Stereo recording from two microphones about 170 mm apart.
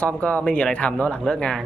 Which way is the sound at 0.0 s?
10° left (ahead or behind).